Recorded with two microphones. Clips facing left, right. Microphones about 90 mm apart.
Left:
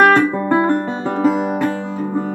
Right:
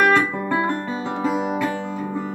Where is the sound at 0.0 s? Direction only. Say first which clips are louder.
Left 5 dB; 50° left (ahead or behind).